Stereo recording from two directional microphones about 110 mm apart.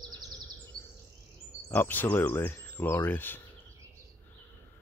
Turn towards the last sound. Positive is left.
turn(degrees=20)  # may be behind; listen again after turning